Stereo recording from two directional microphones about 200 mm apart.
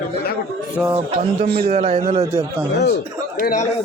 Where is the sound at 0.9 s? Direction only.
30° right (ahead or behind).